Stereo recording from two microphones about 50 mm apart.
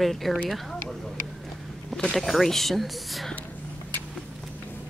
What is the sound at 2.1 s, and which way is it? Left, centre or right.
Speech, centre.